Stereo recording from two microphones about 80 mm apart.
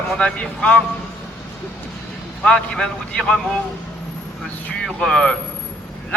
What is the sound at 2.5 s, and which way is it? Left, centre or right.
Speech, centre.